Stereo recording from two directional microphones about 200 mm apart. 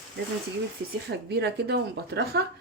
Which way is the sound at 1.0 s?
55° right (ahead or behind).